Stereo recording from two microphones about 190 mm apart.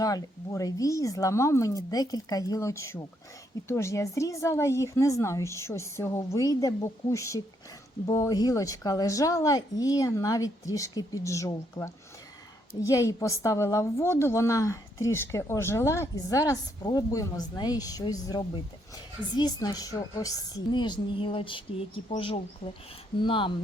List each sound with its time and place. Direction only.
0.0 s a woman's voice: 20° left (ahead or behind)